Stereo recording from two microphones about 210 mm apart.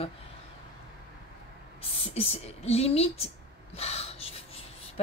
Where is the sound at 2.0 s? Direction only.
30° left (ahead or behind).